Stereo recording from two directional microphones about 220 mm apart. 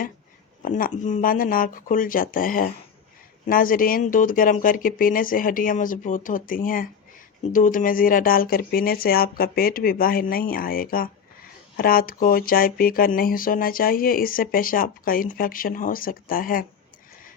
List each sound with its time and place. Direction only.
0.6 s speech: 40° left (ahead or behind)